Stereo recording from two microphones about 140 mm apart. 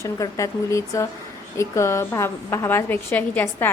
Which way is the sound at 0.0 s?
20° left (ahead or behind).